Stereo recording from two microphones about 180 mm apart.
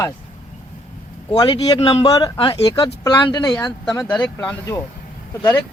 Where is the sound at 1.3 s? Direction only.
25° left (ahead or behind).